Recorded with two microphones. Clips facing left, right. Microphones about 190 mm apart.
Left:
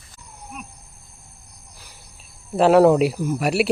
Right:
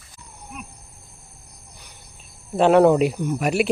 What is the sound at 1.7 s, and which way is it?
Cricket, 5° left (ahead or behind).